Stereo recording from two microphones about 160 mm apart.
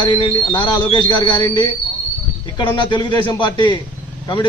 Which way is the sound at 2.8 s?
30° left (ahead or behind).